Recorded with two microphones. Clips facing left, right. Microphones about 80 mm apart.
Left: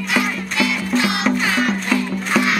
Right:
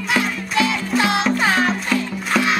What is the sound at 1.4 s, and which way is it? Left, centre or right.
Music, right.